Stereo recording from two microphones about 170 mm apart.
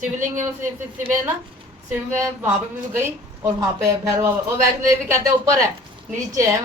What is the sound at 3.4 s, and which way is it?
Speech, 20° right (ahead or behind).